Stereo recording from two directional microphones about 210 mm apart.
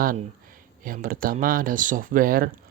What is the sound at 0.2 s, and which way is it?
Speech, 40° right (ahead or behind).